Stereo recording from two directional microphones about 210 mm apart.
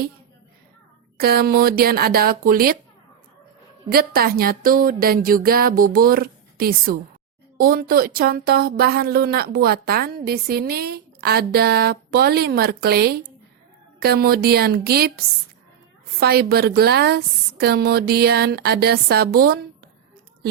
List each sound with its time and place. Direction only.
1.2 s speech: 45° right (ahead or behind)
3.8 s speech: 45° right (ahead or behind)
16.2 s speech: 45° right (ahead or behind)